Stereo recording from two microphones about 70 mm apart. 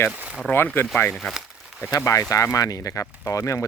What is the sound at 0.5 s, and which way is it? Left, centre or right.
Speech, left.